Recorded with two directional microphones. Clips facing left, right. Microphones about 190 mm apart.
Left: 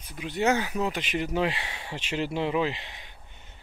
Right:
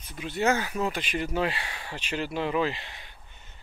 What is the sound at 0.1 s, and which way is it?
Speech, 15° left (ahead or behind).